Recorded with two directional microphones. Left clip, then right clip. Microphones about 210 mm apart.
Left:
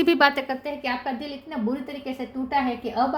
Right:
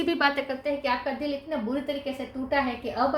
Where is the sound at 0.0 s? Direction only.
50° left (ahead or behind).